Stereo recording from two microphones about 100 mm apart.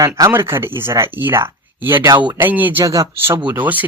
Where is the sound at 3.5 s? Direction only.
15° right (ahead or behind).